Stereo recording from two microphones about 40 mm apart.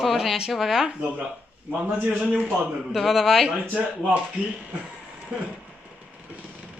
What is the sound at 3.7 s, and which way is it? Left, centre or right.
Speech, right.